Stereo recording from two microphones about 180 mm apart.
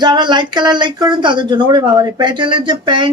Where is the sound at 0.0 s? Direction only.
25° right (ahead or behind).